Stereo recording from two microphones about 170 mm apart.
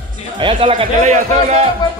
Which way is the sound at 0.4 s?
30° right (ahead or behind).